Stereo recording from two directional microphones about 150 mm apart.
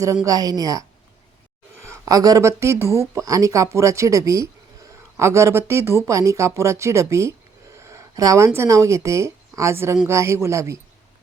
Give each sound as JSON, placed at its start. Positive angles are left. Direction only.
{"t": 0.3, "sound": "speech", "side_deg": -25}